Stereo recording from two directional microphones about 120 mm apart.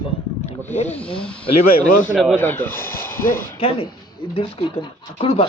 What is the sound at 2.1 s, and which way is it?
Speech, 5° right (ahead or behind).